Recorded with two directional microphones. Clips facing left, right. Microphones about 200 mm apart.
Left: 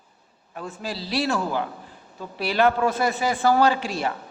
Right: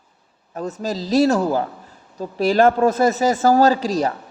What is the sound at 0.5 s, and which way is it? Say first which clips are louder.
A woman's voice: right 7 dB; 40° right (ahead or behind).